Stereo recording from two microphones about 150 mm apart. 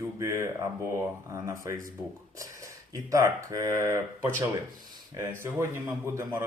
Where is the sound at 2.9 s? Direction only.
20° right (ahead or behind).